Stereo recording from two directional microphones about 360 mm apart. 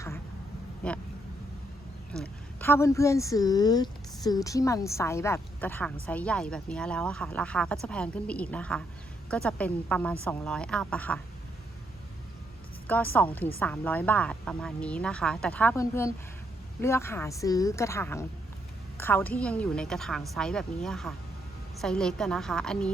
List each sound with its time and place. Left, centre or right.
2.1 s speech: centre
13.1 s a woman's voice: centre